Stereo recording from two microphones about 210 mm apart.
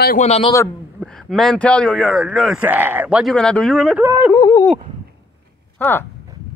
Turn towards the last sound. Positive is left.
turn(degrees=10)  # may be behind; listen again after turning